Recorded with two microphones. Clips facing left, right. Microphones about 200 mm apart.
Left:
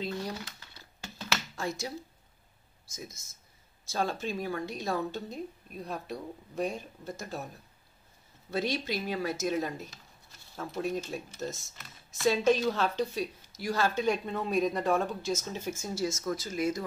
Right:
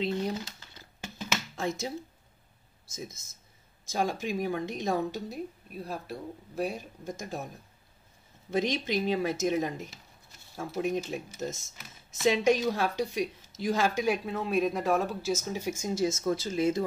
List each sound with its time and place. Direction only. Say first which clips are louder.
0.0 s a sound: right 5 dB; 25° right (ahead or behind)
1.6 s speech: right 5 dB; 20° right (ahead or behind)
3.9 s a woman's voice: right 2 dB; 15° right (ahead or behind)
8.5 s a woman's voice: right 3 dB; 20° right (ahead or behind)
12.2 s a woman's voice: right 1 dB; 15° right (ahead or behind)